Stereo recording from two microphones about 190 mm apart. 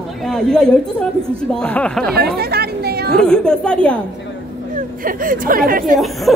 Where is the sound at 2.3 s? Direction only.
55° right (ahead or behind).